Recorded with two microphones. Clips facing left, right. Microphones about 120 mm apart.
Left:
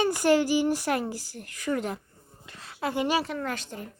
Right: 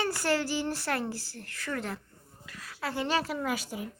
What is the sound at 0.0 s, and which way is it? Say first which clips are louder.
A woman's voice: left 7 dB; 15° left (ahead or behind).